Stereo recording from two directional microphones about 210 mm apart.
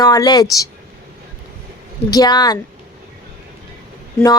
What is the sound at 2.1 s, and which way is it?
Speech, 20° left (ahead or behind).